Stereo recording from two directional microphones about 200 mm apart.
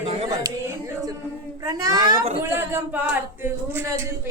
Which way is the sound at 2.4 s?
15° right (ahead or behind).